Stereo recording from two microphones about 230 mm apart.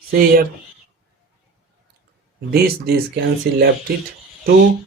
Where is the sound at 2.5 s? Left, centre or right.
Right.